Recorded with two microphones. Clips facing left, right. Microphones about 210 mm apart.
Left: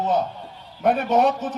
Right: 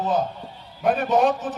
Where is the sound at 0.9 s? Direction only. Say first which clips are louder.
Left 1 dB; 60° left (ahead or behind).